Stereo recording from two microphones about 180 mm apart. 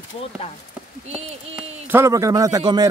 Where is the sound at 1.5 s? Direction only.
10° right (ahead or behind).